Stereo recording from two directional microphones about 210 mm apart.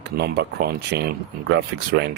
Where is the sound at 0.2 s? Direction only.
50° right (ahead or behind).